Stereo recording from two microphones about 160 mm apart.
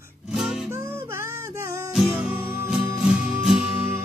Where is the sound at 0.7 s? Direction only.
15° right (ahead or behind).